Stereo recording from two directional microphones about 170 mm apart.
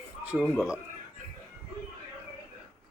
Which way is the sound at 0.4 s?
Centre (ahead or behind).